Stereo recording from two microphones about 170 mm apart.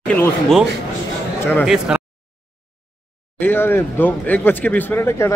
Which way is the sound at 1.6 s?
5° right (ahead or behind).